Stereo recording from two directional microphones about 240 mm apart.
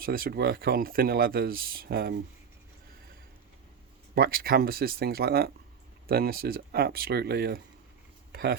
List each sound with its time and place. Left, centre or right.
0.0 s speech: right
4.1 s speech: right
8.3 s a sound: right